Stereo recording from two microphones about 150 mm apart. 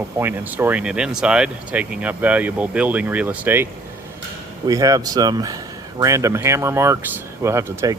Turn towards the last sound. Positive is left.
turn(degrees=-20)  # may be behind; listen again after turning